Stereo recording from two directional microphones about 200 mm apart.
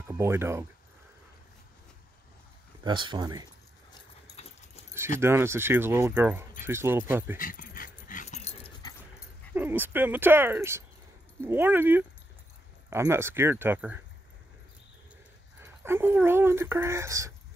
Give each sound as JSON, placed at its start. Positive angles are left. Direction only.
{"t": 0.1, "sound": "speech", "side_deg": -15}
{"t": 2.8, "sound": "speech", "side_deg": -25}
{"t": 5.2, "sound": "speech", "side_deg": -10}
{"t": 7.3, "sound": "dog", "side_deg": 45}
{"t": 9.6, "sound": "speech", "side_deg": -10}
{"t": 15.6, "sound": "speech", "side_deg": -10}